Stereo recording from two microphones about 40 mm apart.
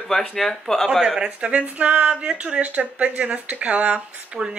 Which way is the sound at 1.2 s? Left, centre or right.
Right.